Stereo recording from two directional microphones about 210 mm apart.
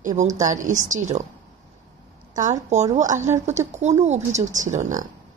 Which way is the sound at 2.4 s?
35° right (ahead or behind).